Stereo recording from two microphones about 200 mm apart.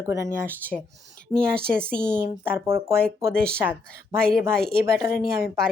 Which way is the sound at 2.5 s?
10° right (ahead or behind).